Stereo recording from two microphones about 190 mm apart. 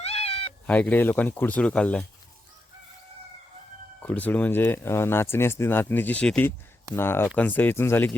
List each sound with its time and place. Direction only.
0.0 s cat: 30° left (ahead or behind)
0.7 s speech: 10° left (ahead or behind)
4.0 s speech: 10° left (ahead or behind)